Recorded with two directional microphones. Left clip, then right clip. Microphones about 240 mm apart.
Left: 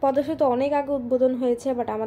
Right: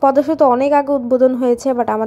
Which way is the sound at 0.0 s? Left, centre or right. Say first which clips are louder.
Right 9 dB; right.